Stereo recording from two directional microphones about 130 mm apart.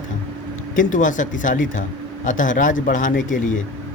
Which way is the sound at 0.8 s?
80° left.